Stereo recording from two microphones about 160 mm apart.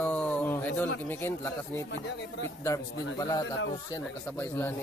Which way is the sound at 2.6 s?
20° left (ahead or behind).